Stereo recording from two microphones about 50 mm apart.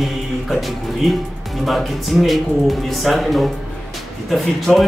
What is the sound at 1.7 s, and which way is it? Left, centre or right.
A man's voice, centre.